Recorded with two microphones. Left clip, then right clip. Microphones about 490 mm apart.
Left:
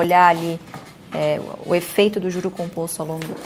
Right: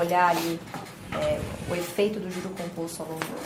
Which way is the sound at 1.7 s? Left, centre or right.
Left.